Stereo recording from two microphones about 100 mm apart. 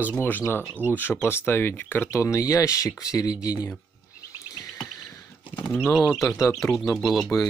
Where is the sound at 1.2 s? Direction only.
20° left (ahead or behind).